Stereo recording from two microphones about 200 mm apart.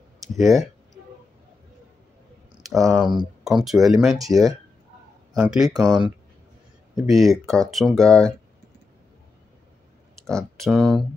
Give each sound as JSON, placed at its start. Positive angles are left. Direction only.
{"t": 0.2, "sound": "speech", "side_deg": 0}
{"t": 2.6, "sound": "a sound", "side_deg": 0}
{"t": 3.4, "sound": "speech", "side_deg": 0}
{"t": 4.2, "sound": "speech", "side_deg": -15}
{"t": 5.3, "sound": "speech", "side_deg": -5}
{"t": 5.7, "sound": "speech", "side_deg": -20}
{"t": 7.0, "sound": "speech", "side_deg": 0}
{"t": 10.1, "sound": "speech", "side_deg": 0}